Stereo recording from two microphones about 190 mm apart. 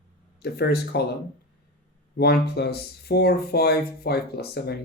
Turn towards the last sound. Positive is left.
turn(degrees=55)  # may be behind; listen again after turning